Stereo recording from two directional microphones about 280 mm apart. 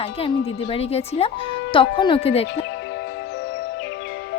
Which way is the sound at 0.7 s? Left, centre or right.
Left.